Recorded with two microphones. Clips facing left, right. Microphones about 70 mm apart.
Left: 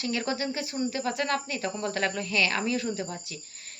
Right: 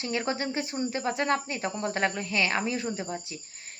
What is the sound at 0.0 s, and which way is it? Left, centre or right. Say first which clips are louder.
A woman's voice: even; right.